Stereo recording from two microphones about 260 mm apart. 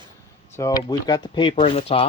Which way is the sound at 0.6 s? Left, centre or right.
Centre.